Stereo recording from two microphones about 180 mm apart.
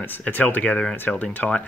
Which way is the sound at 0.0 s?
10° left (ahead or behind).